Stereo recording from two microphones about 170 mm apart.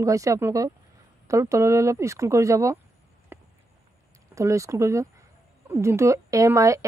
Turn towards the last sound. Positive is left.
turn(degrees=-20)  # may be behind; listen again after turning